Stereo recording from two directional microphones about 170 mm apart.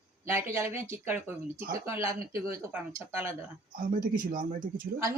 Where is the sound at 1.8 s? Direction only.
15° right (ahead or behind).